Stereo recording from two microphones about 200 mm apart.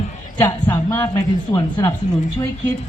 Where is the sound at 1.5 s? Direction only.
25° left (ahead or behind).